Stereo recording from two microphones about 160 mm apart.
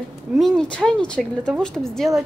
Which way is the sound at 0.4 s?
5° left (ahead or behind).